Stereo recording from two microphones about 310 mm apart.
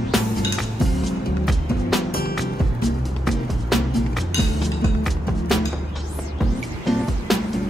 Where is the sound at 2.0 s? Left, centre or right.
Left.